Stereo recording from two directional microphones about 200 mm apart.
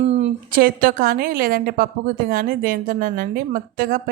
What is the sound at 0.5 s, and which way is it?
A woman's voice, 45° right (ahead or behind).